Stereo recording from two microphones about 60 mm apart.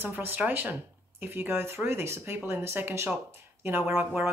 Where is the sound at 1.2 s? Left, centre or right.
Right.